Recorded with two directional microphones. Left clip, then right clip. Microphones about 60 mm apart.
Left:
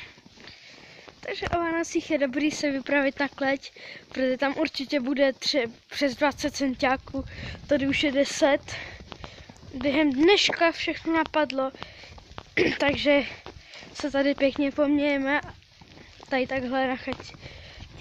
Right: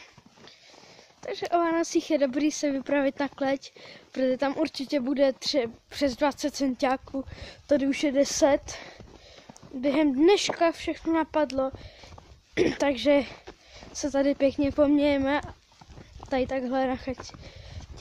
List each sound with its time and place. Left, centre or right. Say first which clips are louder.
1.5 s speech: right 3 dB; right
7.3 s speech: even; right
12.5 s speech: left 1 dB; right
12.9 s speech: left 1 dB; right